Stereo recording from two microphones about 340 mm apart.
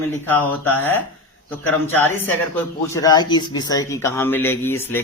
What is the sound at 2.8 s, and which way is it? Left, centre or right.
Speech, centre.